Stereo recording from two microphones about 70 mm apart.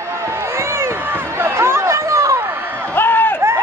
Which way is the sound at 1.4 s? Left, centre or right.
Right.